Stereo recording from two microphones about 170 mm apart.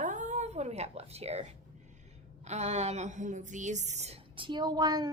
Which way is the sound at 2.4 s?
40° right (ahead or behind).